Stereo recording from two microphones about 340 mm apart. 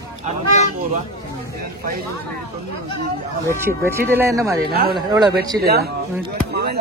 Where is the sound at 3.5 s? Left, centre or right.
Centre.